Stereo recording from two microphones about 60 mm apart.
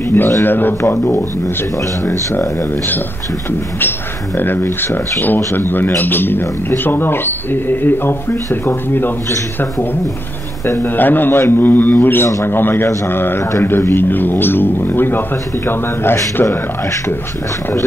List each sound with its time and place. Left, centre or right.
0.4 s speech: left
4.4 s speech: left
10.6 s a man's voice: left
11.0 s speech: left